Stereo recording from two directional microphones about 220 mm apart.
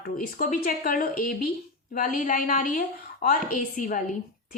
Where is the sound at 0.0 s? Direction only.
40° left (ahead or behind).